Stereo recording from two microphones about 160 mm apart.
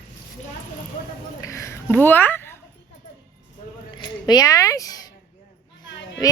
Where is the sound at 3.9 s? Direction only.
25° left (ahead or behind).